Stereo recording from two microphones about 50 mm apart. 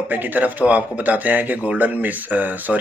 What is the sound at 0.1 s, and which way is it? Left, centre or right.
Speech, right.